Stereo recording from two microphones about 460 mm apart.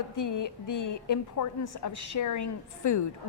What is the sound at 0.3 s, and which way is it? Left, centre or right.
A woman's voice, left.